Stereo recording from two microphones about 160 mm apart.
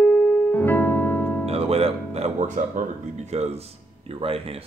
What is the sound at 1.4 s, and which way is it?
Speech, 40° right (ahead or behind).